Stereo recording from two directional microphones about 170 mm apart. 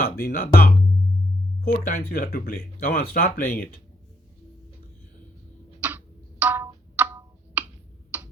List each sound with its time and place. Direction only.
0.0 s speech: 60° left (ahead or behind)
5.8 s a sound: 10° right (ahead or behind)
8.1 s tick-tock: 10° right (ahead or behind)